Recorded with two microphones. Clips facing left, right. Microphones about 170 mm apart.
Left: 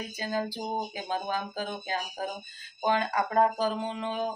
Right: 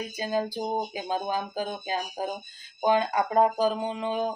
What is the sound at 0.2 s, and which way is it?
Speech, 15° right (ahead or behind).